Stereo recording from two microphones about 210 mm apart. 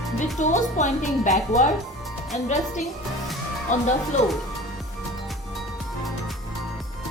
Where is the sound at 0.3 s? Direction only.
35° left (ahead or behind).